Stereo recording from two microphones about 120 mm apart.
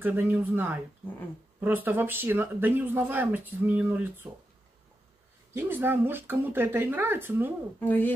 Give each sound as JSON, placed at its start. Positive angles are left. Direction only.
{"t": 0.0, "sound": "speech", "side_deg": -15}
{"t": 5.5, "sound": "speech", "side_deg": -20}
{"t": 7.8, "sound": "speech", "side_deg": 15}